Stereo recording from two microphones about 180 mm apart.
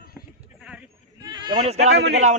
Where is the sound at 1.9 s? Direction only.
70° right (ahead or behind).